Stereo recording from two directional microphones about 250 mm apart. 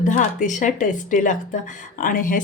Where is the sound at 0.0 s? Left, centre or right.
Left.